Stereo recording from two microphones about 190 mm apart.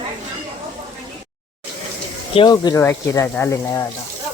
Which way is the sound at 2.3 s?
25° left (ahead or behind).